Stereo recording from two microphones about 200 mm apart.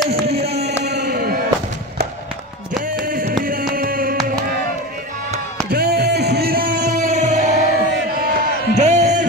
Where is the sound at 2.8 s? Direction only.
45° right (ahead or behind).